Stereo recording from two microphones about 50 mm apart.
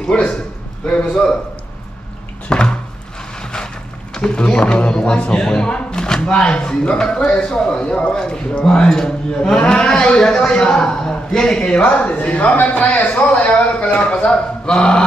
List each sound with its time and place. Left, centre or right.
0.1 s speech: centre
2.5 s cupboard open or close: centre
3.5 s a man's voice: centre